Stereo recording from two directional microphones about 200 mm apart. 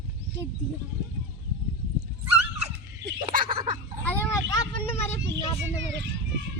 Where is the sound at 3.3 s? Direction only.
45° right (ahead or behind).